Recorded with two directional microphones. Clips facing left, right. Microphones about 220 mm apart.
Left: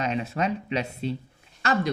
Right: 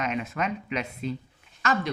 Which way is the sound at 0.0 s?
30° left (ahead or behind).